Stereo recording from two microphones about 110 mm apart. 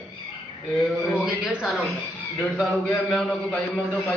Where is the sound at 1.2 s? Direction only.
5° right (ahead or behind).